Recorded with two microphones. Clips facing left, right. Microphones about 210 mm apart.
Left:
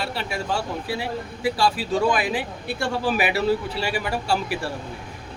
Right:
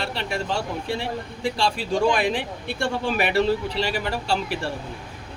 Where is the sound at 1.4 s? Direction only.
5° left (ahead or behind).